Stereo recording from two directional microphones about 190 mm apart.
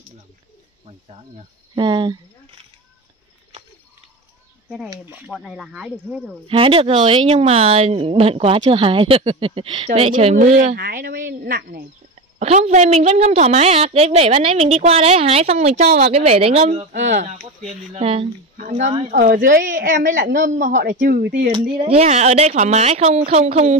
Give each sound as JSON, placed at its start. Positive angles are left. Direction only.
{"t": 1.8, "sound": "speech", "side_deg": -25}
{"t": 5.0, "sound": "speech", "side_deg": -5}
{"t": 6.4, "sound": "speech", "side_deg": -30}
{"t": 10.6, "sound": "a woman's voice", "side_deg": -50}
{"t": 12.4, "sound": "a woman's voice", "side_deg": -35}
{"t": 19.1, "sound": "a woman's voice", "side_deg": -50}
{"t": 21.7, "sound": "a woman's voice", "side_deg": -30}